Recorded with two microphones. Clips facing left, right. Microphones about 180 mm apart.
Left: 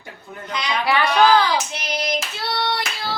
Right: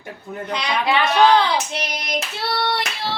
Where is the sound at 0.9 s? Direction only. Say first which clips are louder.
Even; 20° right (ahead or behind).